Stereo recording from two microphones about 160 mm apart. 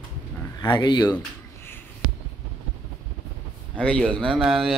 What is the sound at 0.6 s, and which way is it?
Speech, 30° left (ahead or behind).